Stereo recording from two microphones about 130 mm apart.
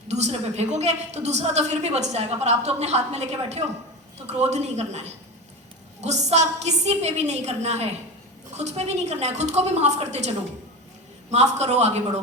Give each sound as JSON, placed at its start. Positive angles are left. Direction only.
{"t": 0.1, "sound": "a woman's voice", "side_deg": -55}